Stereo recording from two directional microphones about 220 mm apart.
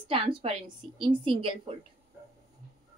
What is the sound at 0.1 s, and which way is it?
A woman's voice, 25° right (ahead or behind).